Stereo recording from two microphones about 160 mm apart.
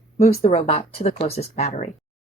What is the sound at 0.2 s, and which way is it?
Speech, 45° left (ahead or behind).